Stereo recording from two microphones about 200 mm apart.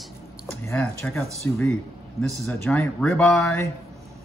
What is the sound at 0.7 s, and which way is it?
Speech, 5° left (ahead or behind).